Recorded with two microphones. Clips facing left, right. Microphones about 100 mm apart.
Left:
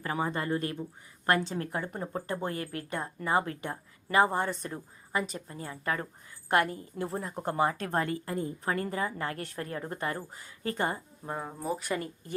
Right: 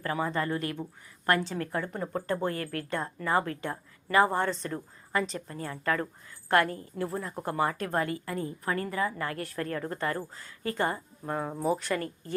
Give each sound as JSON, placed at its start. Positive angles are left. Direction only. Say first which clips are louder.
{"t": 0.0, "sound": "a woman's voice", "louder": "right 2 dB", "side_deg": 20}
{"t": 11.3, "sound": "speech", "louder": "right 6 dB", "side_deg": 0}
{"t": 11.8, "sound": "speech", "louder": "right 2 dB", "side_deg": 15}